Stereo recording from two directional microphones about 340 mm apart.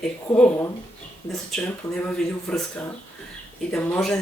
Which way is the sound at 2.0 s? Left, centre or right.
Centre.